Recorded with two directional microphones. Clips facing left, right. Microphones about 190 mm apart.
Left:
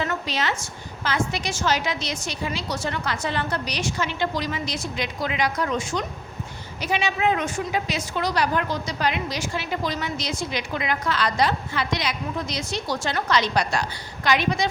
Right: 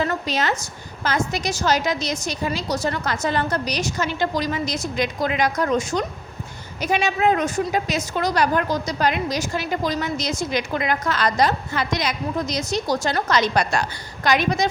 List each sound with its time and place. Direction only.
0.0 s a woman's voice: 40° right (ahead or behind)